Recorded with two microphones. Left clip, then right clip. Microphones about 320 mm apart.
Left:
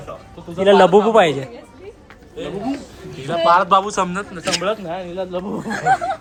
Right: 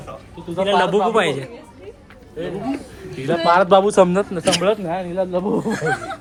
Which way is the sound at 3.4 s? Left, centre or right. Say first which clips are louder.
Even; centre.